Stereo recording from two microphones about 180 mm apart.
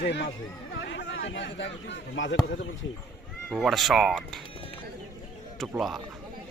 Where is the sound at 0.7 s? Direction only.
90° left.